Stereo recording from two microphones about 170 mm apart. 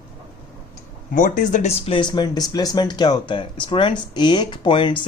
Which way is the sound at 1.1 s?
50° left (ahead or behind).